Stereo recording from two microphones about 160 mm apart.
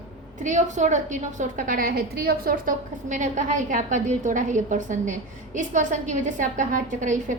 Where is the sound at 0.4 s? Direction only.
50° right (ahead or behind).